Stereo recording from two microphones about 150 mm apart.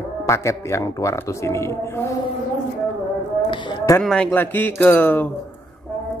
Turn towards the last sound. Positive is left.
turn(degrees=10)  # may be behind; listen again after turning